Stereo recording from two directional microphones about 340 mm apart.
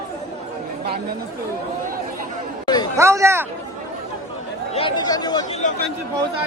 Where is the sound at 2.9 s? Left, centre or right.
Centre.